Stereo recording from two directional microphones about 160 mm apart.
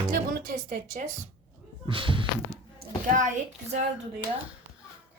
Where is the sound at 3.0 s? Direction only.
55° right (ahead or behind).